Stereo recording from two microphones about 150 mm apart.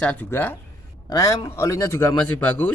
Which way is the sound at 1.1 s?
25° left (ahead or behind).